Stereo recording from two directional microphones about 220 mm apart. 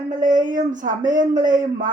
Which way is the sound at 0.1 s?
35° right (ahead or behind).